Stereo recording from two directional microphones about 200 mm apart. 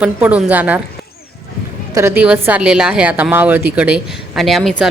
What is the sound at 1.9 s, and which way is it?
A woman's voice, 10° right (ahead or behind).